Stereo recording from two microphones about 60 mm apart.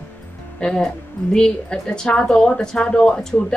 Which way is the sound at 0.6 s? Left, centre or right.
Centre.